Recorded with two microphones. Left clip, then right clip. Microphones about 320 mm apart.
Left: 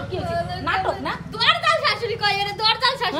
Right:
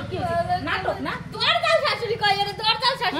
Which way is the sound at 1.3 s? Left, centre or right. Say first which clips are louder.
Left 1 dB; centre.